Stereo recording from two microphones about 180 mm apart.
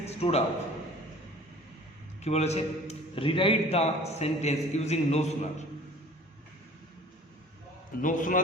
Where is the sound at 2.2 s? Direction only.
35° left (ahead or behind).